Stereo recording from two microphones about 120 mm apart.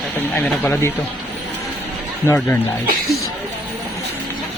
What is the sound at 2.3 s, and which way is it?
Speech, 20° left (ahead or behind).